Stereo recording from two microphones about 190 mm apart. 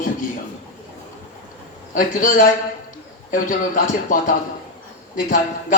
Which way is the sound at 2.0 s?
45° left (ahead or behind).